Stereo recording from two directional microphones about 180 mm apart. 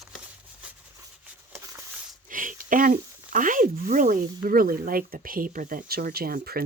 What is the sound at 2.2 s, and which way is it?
Speech, 50° right (ahead or behind).